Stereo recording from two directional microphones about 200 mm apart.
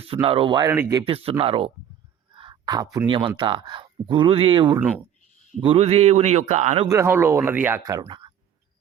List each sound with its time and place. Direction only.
0.1 s speech: 25° right (ahead or behind)
1.0 s a man's voice: 30° right (ahead or behind)
6.8 s speech: 15° right (ahead or behind)